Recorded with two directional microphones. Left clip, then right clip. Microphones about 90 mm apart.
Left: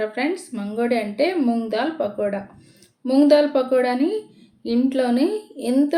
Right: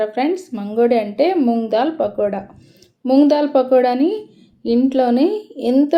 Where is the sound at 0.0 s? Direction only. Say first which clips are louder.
Right 5 dB; 30° right (ahead or behind).